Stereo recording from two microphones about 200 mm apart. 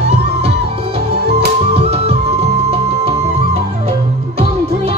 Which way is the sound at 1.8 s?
30° right (ahead or behind).